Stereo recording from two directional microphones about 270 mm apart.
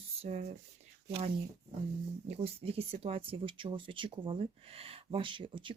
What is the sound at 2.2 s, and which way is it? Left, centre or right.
Speech, right.